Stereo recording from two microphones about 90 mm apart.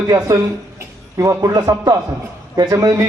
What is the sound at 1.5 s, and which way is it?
A man's voice, 45° right (ahead or behind).